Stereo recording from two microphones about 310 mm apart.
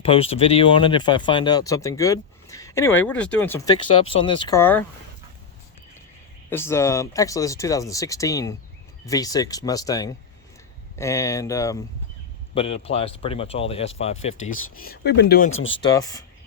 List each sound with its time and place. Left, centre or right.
0.0 s speech: centre
6.5 s speech: centre; by 15.8 s left
16.0 s speech: centre